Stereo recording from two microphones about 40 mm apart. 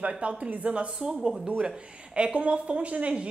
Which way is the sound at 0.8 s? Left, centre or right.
Right.